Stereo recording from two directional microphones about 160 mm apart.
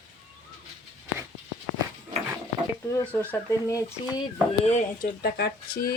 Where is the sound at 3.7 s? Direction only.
20° left (ahead or behind).